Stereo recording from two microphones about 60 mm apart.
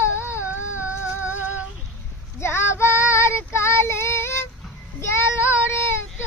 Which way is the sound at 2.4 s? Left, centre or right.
Left.